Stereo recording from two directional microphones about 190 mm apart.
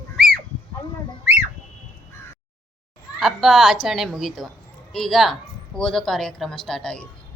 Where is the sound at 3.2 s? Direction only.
Centre (ahead or behind).